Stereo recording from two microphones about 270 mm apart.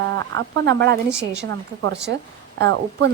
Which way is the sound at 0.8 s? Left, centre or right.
Right.